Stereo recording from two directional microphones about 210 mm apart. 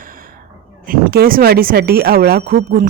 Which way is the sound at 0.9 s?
45° right (ahead or behind).